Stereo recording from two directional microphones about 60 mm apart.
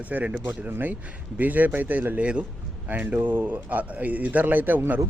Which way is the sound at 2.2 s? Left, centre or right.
Centre.